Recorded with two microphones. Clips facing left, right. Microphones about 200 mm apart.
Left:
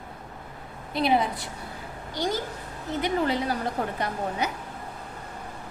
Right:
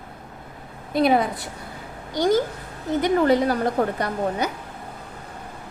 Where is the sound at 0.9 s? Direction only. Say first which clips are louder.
Right 5 dB; 45° right (ahead or behind).